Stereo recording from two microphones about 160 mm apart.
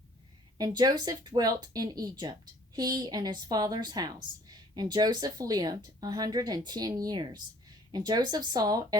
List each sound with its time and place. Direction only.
0.6 s a woman's voice: 25° right (ahead or behind)